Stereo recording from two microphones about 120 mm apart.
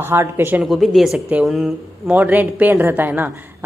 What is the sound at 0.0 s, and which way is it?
Speech, 20° right (ahead or behind).